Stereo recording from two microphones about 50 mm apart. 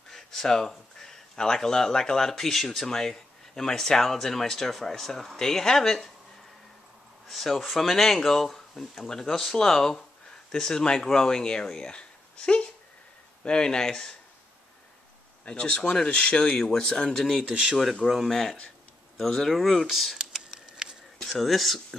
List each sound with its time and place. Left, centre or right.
0.1 s speech: centre
7.2 s speech: centre
15.4 s speech: left
17.4 s speech: centre
18.1 s speech: centre
20.5 s a sound: centre
21.2 s speech: centre